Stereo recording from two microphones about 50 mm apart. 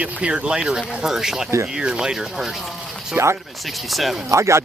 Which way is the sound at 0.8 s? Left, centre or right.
Centre.